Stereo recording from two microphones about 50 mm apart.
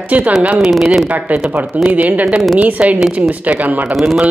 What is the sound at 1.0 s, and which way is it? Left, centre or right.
Speech, right.